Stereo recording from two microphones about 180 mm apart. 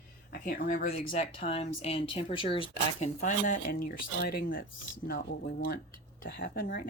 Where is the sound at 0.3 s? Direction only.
55° left (ahead or behind).